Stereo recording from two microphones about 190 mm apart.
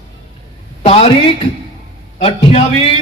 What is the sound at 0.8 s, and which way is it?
Speech, 35° left (ahead or behind).